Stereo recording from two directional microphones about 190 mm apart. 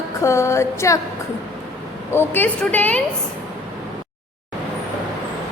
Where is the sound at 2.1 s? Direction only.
10° left (ahead or behind).